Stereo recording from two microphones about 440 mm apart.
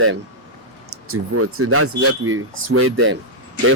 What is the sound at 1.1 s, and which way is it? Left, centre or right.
Speech, right.